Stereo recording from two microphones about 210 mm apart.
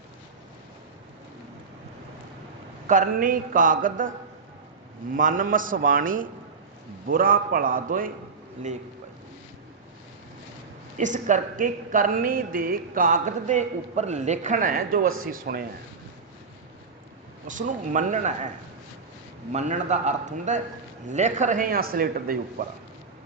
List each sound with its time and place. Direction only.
2.8 s a woman's voice: 40° right (ahead or behind)
5.1 s a woman's voice: 40° right (ahead or behind)
10.9 s a woman's voice: 35° right (ahead or behind)
17.4 s a woman's voice: 35° right (ahead or behind)
19.5 s a woman's voice: 35° right (ahead or behind)